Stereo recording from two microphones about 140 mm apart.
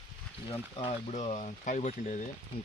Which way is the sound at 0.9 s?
55° left (ahead or behind).